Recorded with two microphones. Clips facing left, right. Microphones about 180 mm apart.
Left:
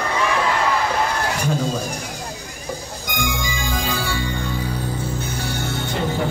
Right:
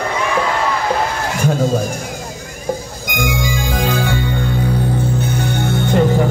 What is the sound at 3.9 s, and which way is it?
Music, 55° right (ahead or behind).